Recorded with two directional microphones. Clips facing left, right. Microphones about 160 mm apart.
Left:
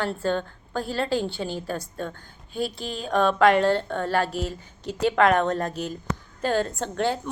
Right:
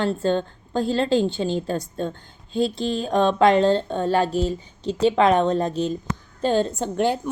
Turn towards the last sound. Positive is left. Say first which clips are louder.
# right 4 dB
turn(degrees=-15)  # may be behind; listen again after turning